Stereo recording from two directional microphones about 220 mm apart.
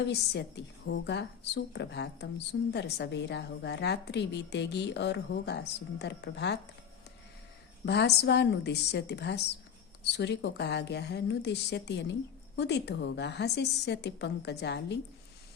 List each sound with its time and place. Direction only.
0.1 s a woman's voice: 50° left (ahead or behind)
7.9 s a woman's voice: 50° left (ahead or behind)